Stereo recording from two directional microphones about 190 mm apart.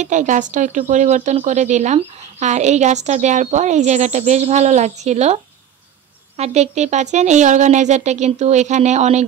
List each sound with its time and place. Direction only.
0.0 s speech: 40° right (ahead or behind)